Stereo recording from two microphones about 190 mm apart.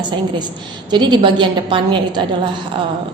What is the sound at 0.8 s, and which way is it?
A woman's voice, 25° right (ahead or behind).